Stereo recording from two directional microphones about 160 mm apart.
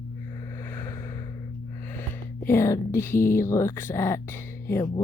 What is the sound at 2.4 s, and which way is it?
Speech, 15° left (ahead or behind).